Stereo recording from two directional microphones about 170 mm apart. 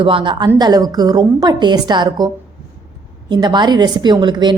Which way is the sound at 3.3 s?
25° right (ahead or behind).